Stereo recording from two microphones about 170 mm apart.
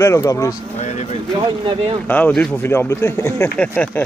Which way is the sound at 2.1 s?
10° left (ahead or behind).